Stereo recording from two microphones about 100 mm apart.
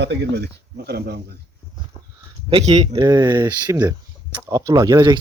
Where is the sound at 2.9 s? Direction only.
40° right (ahead or behind).